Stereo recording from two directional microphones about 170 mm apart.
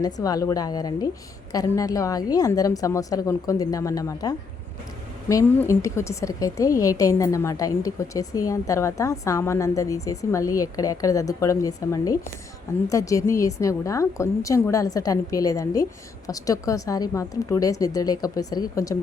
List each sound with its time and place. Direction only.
0.0 s a woman's voice: 20° left (ahead or behind)